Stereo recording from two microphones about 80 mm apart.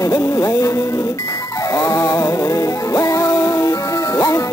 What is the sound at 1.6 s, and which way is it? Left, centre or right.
Music, left.